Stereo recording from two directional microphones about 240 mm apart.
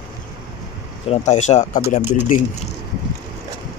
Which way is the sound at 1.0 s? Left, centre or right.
Left.